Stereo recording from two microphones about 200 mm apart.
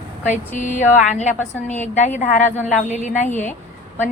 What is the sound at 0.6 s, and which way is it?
Speech, 35° left (ahead or behind).